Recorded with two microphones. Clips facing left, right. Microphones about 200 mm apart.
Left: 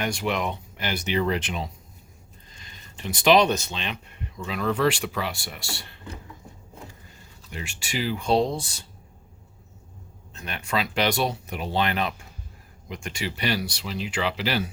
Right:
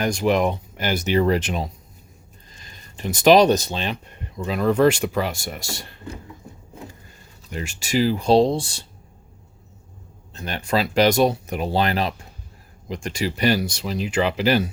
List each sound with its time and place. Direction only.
0.0 s speech: 40° right (ahead or behind)
7.5 s speech: 40° right (ahead or behind)
10.3 s speech: 35° right (ahead or behind)